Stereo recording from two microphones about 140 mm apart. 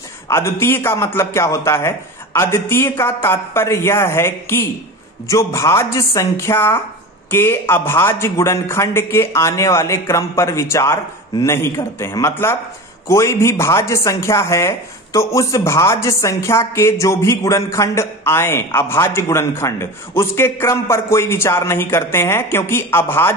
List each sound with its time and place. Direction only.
0.3 s a man's voice: 20° left (ahead or behind)